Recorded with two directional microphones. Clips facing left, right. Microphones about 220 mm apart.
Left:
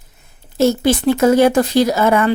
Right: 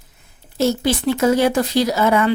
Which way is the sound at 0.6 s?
50° left (ahead or behind).